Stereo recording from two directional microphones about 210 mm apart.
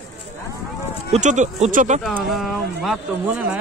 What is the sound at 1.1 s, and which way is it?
Speech, 35° right (ahead or behind).